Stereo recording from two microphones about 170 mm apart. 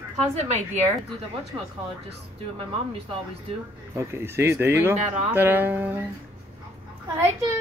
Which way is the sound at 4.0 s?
15° right (ahead or behind).